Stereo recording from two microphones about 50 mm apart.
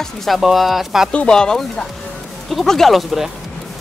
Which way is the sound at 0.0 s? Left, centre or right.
Centre.